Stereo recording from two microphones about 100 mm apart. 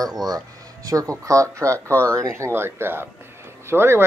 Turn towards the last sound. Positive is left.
turn(degrees=-25)  # may be behind; listen again after turning